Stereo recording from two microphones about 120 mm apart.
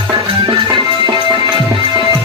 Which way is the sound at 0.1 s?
40° right (ahead or behind).